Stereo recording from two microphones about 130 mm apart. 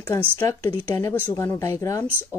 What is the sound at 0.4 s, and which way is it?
Speech, 20° left (ahead or behind).